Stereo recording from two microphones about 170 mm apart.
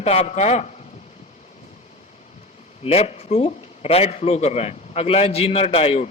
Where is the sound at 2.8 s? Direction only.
35° left (ahead or behind).